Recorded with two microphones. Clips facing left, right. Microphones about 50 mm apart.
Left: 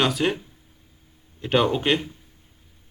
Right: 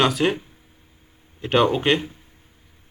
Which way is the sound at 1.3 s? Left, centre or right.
Centre.